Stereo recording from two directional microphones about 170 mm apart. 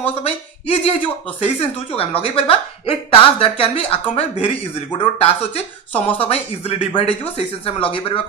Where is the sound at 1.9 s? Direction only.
35° left (ahead or behind).